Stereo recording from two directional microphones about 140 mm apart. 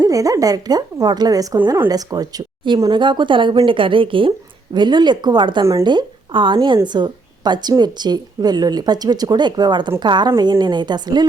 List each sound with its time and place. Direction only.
0.0 s speech: 25° right (ahead or behind)